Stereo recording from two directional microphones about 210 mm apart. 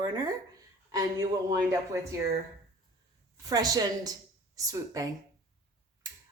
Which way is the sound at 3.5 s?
15° right (ahead or behind).